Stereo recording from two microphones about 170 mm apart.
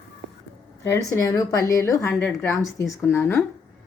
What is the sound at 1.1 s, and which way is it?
A woman's voice, 20° left (ahead or behind).